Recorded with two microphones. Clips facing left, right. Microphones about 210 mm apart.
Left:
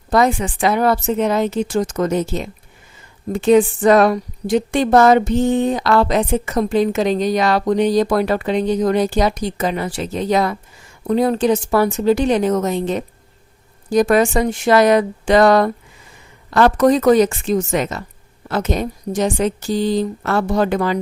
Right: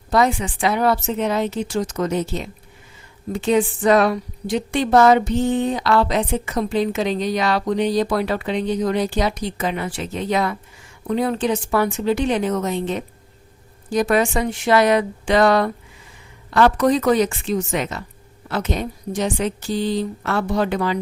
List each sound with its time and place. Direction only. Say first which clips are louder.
0.1 s a woman's voice: left 3 dB; 45° left (ahead or behind)